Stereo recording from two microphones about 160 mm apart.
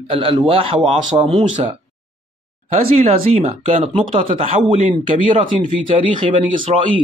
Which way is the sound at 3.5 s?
35° right (ahead or behind).